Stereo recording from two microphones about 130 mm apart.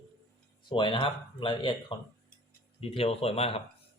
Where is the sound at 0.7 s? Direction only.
40° left (ahead or behind).